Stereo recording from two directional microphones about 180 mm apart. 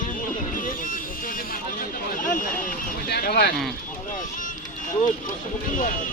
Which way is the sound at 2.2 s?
50° left (ahead or behind).